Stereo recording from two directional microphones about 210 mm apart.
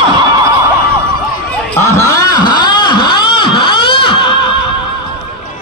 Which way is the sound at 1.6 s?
15° left (ahead or behind).